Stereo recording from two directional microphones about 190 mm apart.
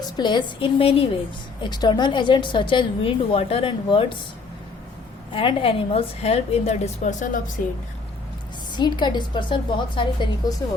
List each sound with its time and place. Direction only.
0.2 s a woman's voice: 25° left (ahead or behind)
5.3 s a woman's voice: 30° left (ahead or behind); by 7.5 s 45° left (ahead or behind)
8.7 s a woman's voice: 25° left (ahead or behind)